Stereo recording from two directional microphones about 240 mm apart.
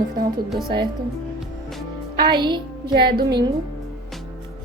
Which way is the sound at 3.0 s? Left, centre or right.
Right.